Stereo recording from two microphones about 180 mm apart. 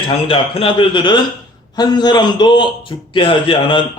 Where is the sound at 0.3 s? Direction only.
30° left (ahead or behind).